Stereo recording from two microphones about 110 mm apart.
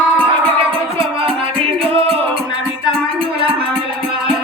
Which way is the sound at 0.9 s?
60° right (ahead or behind).